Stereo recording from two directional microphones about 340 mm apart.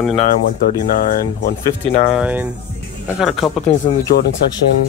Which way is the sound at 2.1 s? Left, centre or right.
Centre.